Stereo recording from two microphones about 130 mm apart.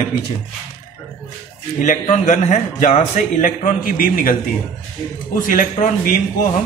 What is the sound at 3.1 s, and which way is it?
A man's voice, 90° left.